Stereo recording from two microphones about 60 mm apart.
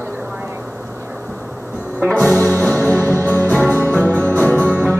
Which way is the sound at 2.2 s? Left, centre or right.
Left.